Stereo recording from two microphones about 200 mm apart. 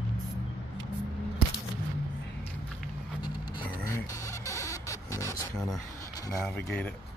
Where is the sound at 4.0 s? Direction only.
15° left (ahead or behind).